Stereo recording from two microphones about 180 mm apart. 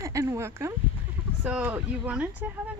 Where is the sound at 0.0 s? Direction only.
15° right (ahead or behind).